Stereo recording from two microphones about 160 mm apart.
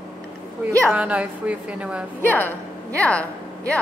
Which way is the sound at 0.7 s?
10° right (ahead or behind).